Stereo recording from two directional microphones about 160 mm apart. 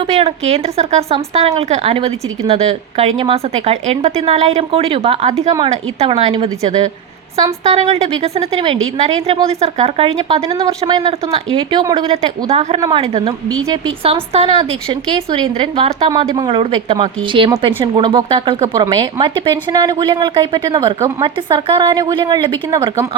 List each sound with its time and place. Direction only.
0.1 s a woman's voice: 40° right (ahead or behind)
12.1 s a woman's voice: 40° right (ahead or behind)